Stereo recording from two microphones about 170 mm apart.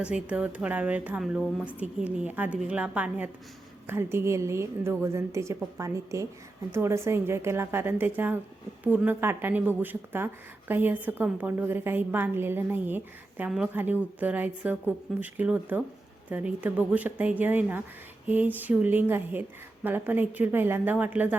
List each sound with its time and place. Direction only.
0.0 s a woman's voice: 5° right (ahead or behind)